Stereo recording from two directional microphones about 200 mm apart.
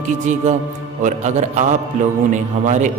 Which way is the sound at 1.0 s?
40° right (ahead or behind).